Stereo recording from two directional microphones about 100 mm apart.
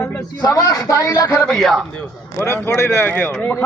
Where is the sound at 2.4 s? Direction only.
25° left (ahead or behind).